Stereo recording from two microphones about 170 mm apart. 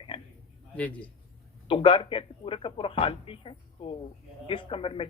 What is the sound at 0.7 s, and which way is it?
Speech, 10° left (ahead or behind).